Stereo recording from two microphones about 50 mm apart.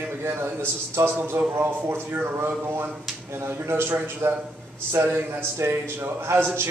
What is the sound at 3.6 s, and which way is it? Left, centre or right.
A man's voice, right.